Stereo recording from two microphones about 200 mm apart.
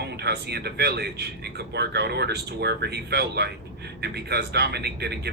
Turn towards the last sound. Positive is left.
turn(degrees=-55)  # may be behind; listen again after turning